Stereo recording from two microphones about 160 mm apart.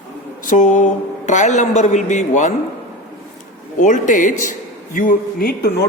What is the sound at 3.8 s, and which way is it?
A woman's voice, 50° left (ahead or behind).